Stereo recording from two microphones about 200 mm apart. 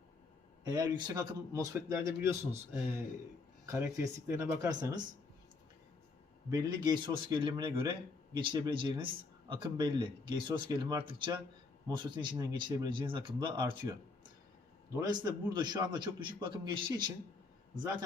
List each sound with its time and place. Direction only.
0.6 s a man's voice: 20° right (ahead or behind)
3.7 s speech: 15° right (ahead or behind)
6.5 s a man's voice: 20° right (ahead or behind)
14.9 s a man's voice: 20° right (ahead or behind)